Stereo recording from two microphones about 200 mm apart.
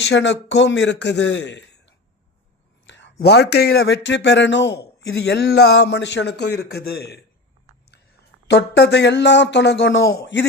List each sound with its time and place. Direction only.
0.1 s speech: 65° left (ahead or behind)
8.4 s speech: 55° left (ahead or behind)